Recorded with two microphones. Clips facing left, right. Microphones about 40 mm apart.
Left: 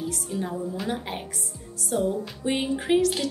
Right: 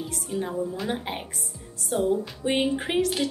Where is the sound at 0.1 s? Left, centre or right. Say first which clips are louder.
Even; centre.